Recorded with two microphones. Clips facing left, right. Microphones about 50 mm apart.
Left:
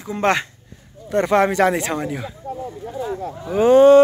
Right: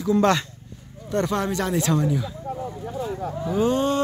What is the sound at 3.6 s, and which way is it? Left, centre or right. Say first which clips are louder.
Speech: left 13 dB; left.